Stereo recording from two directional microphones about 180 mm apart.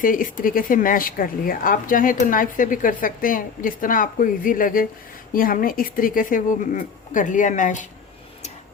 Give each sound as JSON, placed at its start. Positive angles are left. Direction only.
{"t": 0.0, "sound": "speech", "side_deg": 50}